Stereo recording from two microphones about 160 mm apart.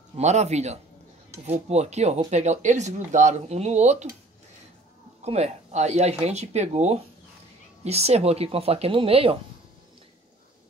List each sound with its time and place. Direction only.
0.2 s speech: 45° right (ahead or behind)
5.2 s speech: 40° right (ahead or behind)